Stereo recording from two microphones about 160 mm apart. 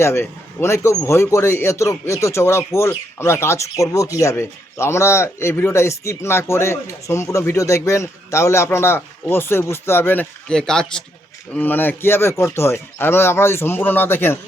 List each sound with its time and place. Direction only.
0.0 s speech: 15° left (ahead or behind)